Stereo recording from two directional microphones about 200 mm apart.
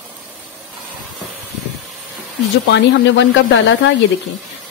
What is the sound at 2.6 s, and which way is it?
Speech, 65° left (ahead or behind).